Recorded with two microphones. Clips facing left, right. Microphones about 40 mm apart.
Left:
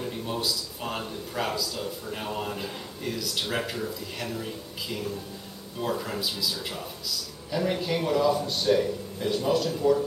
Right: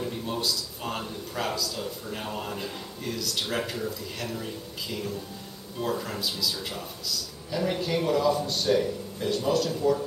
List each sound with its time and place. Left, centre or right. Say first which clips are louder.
0.0 s a man's voice: even; centre